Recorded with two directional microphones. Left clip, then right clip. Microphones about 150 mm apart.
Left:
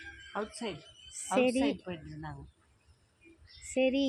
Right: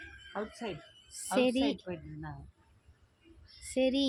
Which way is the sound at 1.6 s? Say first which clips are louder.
Even; 30° left (ahead or behind).